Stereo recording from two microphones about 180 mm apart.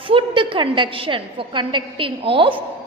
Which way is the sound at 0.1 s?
30° right (ahead or behind).